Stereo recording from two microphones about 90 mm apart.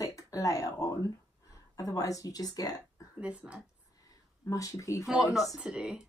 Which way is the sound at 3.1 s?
15° right (ahead or behind).